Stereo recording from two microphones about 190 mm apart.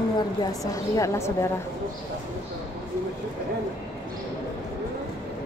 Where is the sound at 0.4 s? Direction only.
20° left (ahead or behind).